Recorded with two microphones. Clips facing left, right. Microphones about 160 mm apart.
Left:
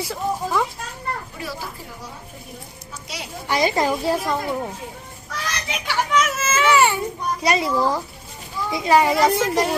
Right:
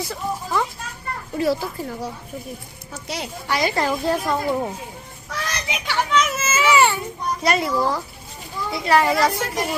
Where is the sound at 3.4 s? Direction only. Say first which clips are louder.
Left 2 dB; 20° left (ahead or behind); by 4.6 s centre (ahead or behind).